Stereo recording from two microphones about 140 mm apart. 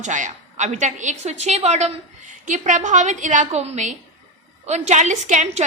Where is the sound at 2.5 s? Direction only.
60° right (ahead or behind).